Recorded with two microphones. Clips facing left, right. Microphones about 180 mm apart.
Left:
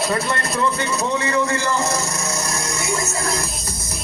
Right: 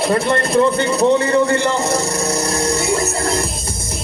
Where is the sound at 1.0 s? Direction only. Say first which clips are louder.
Right 8 dB; 35° right (ahead or behind).